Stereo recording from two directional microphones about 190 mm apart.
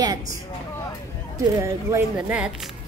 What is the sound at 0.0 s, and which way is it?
Speech, 20° right (ahead or behind).